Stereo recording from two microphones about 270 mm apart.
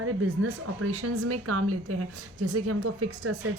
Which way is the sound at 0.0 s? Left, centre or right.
Right.